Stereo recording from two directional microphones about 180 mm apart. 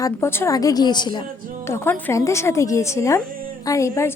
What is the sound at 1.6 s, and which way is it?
A woman's voice, 15° left (ahead or behind).